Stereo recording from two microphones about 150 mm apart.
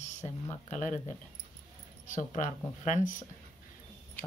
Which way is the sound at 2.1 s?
60° left (ahead or behind).